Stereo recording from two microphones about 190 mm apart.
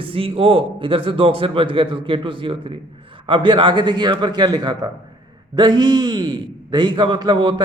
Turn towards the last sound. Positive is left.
turn(degrees=-25)  # may be behind; listen again after turning